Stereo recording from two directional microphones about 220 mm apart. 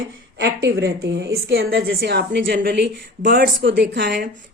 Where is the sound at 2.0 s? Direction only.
50° right (ahead or behind).